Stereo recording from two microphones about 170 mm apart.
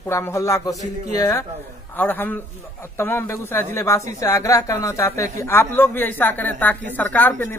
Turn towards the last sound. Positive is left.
turn(degrees=10)  # may be behind; listen again after turning